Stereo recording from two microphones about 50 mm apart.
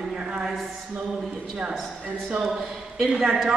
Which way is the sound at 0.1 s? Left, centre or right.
Centre.